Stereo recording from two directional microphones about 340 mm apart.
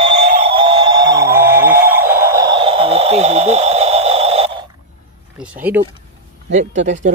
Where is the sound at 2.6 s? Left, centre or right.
Centre.